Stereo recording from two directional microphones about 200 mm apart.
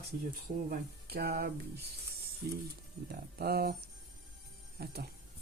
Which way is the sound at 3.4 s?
50° right (ahead or behind).